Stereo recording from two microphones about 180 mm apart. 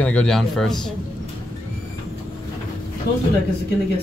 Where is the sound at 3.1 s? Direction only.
60° left (ahead or behind).